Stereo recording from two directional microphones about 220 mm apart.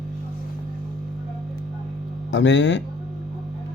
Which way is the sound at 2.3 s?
55° left (ahead or behind).